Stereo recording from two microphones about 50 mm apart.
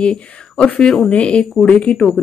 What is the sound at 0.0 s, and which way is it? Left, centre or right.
A woman's voice, left.